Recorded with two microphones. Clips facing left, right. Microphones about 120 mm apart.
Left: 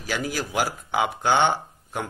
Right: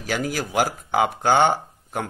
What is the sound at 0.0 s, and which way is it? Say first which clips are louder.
Speech: right 2 dB; 50° right (ahead or behind).